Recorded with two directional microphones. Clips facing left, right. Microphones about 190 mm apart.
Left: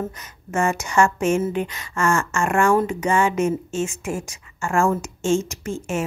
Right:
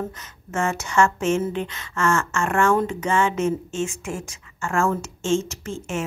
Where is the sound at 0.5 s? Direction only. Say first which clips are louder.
Left 3 dB; 15° left (ahead or behind).